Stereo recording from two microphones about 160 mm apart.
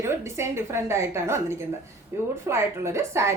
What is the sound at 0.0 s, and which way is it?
A woman's voice, 15° right (ahead or behind).